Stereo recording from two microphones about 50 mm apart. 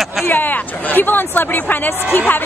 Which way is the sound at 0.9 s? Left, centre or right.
Left.